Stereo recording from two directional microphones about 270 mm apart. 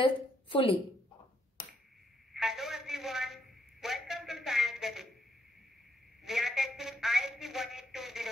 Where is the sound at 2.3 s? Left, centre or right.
Centre.